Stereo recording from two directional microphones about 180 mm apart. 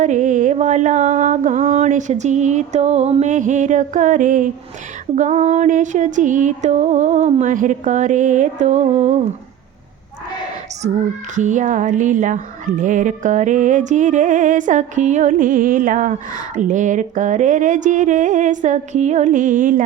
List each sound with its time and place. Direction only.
0.0 s mantra: 45° right (ahead or behind)
5.1 s music: 40° right (ahead or behind)
11.3 s music: 45° right (ahead or behind)